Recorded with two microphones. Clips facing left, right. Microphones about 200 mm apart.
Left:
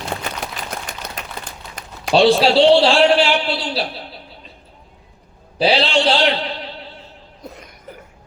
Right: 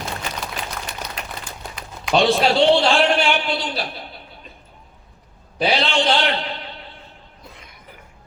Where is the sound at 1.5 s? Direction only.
40° left (ahead or behind).